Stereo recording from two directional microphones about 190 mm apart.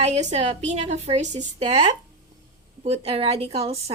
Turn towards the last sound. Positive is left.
turn(degrees=-30)  # may be behind; listen again after turning